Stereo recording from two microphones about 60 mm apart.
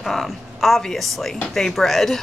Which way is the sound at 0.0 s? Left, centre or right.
Centre.